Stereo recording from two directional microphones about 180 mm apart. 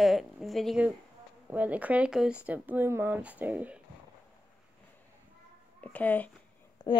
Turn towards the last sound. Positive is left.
turn(degrees=20)  # may be behind; listen again after turning